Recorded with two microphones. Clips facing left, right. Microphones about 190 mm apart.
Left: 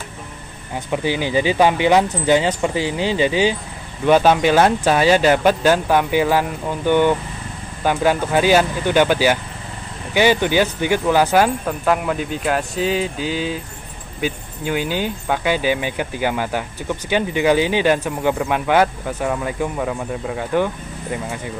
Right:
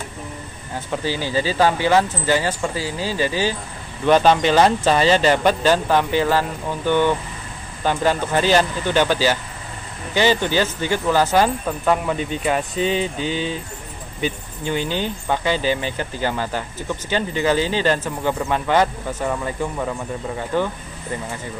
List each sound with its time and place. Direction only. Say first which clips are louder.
0.7 s speech: left 3 dB; 15° left (ahead or behind)